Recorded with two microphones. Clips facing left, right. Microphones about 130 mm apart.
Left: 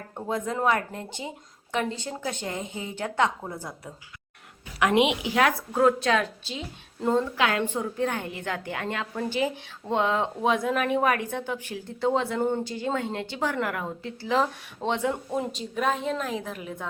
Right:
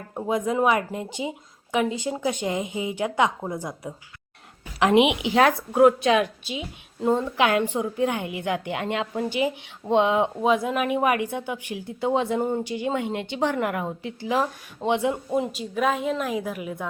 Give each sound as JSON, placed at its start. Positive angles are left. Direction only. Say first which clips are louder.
{"t": 0.1, "sound": "a woman's voice", "louder": "right 5 dB", "side_deg": -15}
{"t": 10.4, "sound": "a woman's voice", "louder": "right 2 dB", "side_deg": -5}